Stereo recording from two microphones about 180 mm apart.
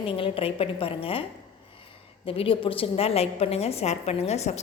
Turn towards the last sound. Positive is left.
turn(degrees=40)  # may be behind; listen again after turning